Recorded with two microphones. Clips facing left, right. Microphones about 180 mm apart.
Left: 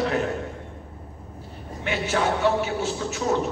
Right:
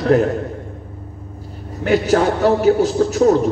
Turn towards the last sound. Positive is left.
turn(degrees=-40)  # may be behind; listen again after turning